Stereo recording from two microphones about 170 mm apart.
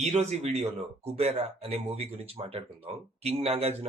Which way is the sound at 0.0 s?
40° right (ahead or behind).